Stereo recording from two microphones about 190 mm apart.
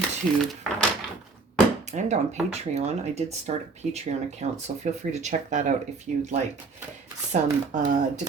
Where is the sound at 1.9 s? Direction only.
35° right (ahead or behind).